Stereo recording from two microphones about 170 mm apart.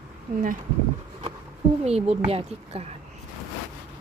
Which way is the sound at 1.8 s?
40° right (ahead or behind).